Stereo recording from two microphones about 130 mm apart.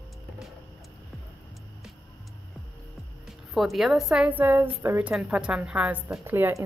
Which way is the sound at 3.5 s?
Centre (ahead or behind).